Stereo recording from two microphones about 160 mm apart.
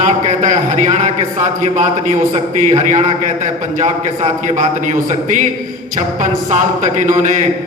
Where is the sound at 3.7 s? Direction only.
50° right (ahead or behind).